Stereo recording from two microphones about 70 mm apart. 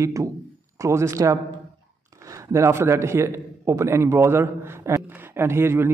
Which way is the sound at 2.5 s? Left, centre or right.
Right.